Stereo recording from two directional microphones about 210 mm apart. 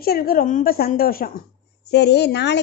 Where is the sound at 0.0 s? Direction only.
45° left (ahead or behind).